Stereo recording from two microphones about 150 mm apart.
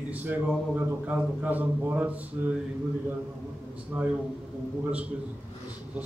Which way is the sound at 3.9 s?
10° right (ahead or behind).